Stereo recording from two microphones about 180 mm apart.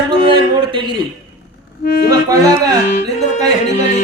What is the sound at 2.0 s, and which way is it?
Speech, 20° right (ahead or behind).